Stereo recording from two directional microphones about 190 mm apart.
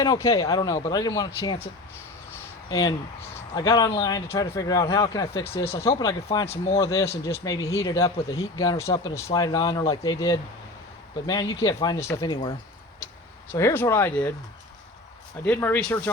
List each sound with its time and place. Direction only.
0.0 s speech: 20° left (ahead or behind)
2.6 s speech: 20° left (ahead or behind)
13.5 s speech: 15° left (ahead or behind)
15.4 s speech: 10° left (ahead or behind)